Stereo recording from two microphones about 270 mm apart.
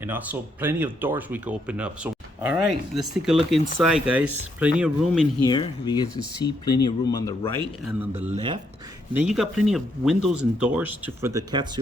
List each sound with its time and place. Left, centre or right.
0.0 s speech: centre
5.5 s speech: centre
8.3 s speech: centre
9.1 s speech: centre